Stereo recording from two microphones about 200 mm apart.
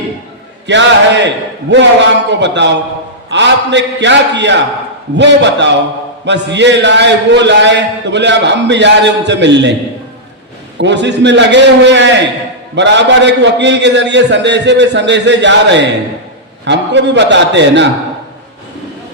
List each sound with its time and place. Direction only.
0.7 s a man's voice: 65° right (ahead or behind)
10.8 s a man's voice: 60° right (ahead or behind)